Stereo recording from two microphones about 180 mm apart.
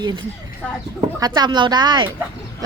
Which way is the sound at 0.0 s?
25° right (ahead or behind).